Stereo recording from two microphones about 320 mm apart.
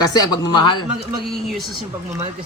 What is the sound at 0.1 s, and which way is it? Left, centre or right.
Speech, centre.